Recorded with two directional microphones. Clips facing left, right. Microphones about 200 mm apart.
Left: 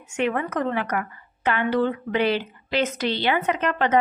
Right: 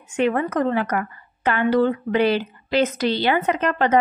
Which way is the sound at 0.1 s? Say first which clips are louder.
Right 4 dB; 35° right (ahead or behind).